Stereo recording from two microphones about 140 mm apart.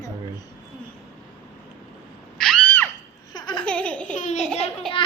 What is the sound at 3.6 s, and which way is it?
Laughter, 5° left (ahead or behind).